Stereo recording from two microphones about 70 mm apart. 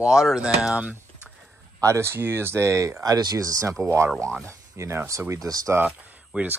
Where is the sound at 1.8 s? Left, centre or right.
Right.